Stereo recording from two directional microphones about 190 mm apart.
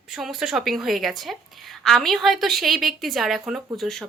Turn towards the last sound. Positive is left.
turn(degrees=0)  # may be behind; listen again after turning